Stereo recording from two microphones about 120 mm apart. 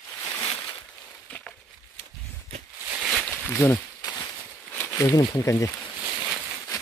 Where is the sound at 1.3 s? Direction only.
10° left (ahead or behind).